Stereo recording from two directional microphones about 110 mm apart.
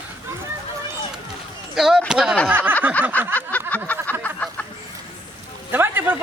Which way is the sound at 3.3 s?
15° left (ahead or behind).